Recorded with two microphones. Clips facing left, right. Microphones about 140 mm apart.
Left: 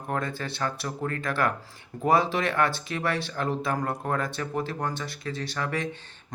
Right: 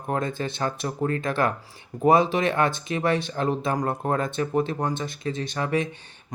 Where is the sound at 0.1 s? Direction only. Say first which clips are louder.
Right 4 dB; 20° right (ahead or behind).